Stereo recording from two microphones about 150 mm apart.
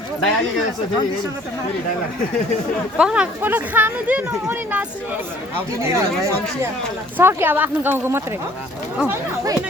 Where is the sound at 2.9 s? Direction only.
5° right (ahead or behind).